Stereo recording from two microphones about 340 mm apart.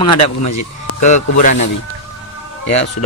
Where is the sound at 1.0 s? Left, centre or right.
Left.